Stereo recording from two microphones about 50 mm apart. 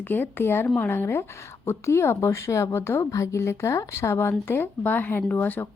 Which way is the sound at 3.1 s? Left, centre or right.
Left.